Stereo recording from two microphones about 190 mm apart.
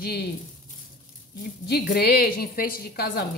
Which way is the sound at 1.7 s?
55° left (ahead or behind).